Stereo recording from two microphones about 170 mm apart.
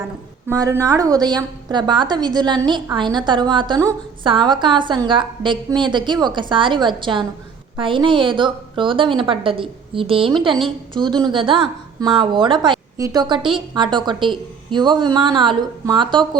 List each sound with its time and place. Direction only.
0.4 s a woman's voice: 15° right (ahead or behind)